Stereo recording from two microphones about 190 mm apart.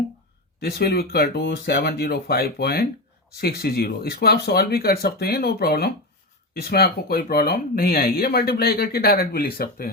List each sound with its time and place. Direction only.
0.6 s speech: 55° left (ahead or behind)